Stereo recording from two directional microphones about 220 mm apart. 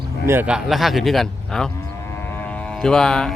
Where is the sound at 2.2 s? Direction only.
5° left (ahead or behind).